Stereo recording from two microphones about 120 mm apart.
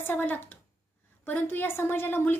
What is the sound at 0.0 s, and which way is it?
A woman's voice, 15° left (ahead or behind).